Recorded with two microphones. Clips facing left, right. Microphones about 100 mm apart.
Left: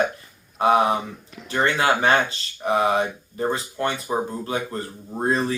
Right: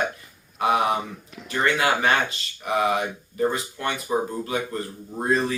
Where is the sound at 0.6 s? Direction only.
30° left (ahead or behind).